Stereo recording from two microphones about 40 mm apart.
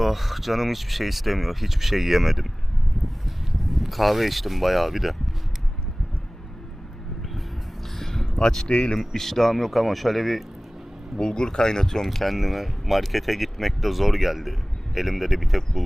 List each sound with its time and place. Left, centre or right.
0.0 s speech: centre
7.9 s a sound: centre
8.3 s speech: left
9.1 s speech: centre
11.2 s speech: centre
12.0 s speech: centre